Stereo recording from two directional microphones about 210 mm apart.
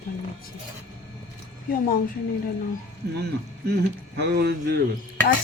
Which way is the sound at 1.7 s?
45° left (ahead or behind).